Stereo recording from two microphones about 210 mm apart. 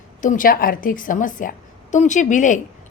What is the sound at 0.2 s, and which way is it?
A woman's voice, 40° left (ahead or behind).